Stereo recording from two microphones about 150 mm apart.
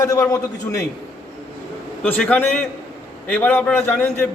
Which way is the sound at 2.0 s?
10° left (ahead or behind).